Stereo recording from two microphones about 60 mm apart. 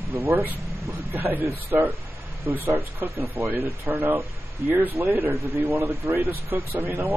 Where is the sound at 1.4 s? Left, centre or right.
Right.